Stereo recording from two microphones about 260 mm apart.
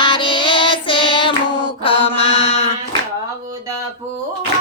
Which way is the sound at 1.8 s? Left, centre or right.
Left.